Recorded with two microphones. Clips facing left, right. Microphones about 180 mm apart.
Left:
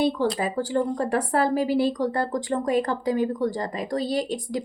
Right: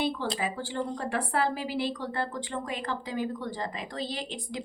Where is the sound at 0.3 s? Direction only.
40° left (ahead or behind).